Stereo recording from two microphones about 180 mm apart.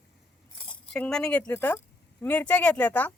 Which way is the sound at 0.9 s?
5° left (ahead or behind).